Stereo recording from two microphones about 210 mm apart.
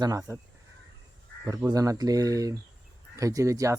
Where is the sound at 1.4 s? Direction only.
15° right (ahead or behind).